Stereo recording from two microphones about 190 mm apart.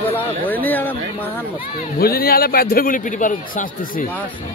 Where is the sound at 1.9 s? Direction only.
55° left (ahead or behind).